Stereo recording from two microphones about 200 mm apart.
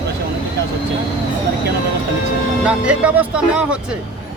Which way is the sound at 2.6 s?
5° right (ahead or behind).